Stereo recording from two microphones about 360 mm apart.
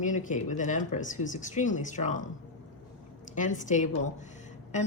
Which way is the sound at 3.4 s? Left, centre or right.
Left.